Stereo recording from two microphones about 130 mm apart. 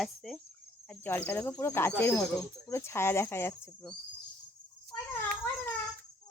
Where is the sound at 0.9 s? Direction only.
15° left (ahead or behind).